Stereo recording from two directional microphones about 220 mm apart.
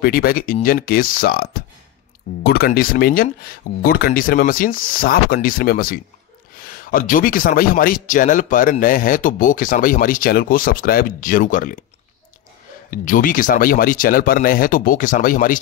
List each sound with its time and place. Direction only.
0.0 s a man's voice: 40° left (ahead or behind)
12.9 s a man's voice: 40° left (ahead or behind)